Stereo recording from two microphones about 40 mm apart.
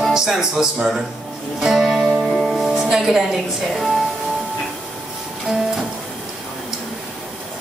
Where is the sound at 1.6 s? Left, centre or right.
Centre.